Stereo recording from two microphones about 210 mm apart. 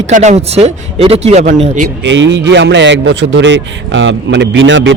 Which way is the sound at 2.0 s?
60° right (ahead or behind).